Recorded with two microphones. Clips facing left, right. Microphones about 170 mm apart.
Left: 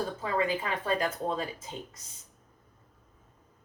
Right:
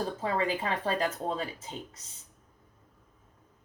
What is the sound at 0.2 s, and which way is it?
Speech, 35° right (ahead or behind).